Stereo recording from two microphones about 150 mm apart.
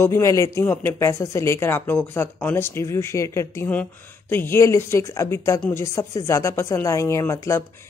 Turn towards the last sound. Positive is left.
turn(degrees=20)  # may be behind; listen again after turning